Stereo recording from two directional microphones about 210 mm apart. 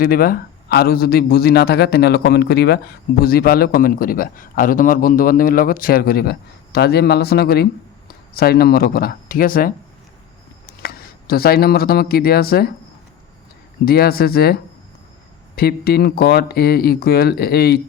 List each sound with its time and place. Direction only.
0.0 s speech: 45° left (ahead or behind)
13.8 s speech: 45° left (ahead or behind)